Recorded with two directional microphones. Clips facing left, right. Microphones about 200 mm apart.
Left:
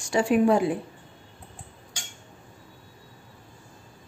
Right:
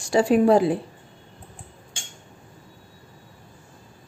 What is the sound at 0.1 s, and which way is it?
Speech, 35° right (ahead or behind).